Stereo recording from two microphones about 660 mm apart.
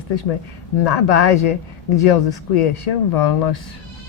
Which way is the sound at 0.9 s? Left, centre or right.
Left.